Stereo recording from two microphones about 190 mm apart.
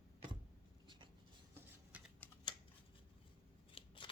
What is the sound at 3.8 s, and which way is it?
Scissors, 25° left (ahead or behind).